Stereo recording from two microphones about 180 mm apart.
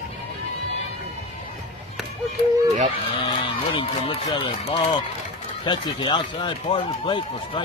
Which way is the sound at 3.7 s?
35° left (ahead or behind).